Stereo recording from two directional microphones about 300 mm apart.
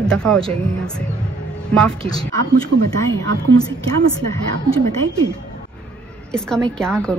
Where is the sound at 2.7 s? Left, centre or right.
Right.